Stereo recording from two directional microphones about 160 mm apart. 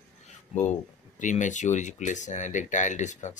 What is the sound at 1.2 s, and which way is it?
Speech, 50° left (ahead or behind).